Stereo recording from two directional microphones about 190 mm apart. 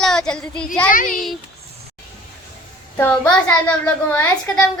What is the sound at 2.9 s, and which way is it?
A child's voice, 10° left (ahead or behind).